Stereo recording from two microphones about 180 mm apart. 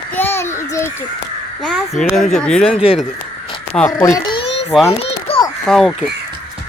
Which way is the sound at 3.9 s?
25° left (ahead or behind).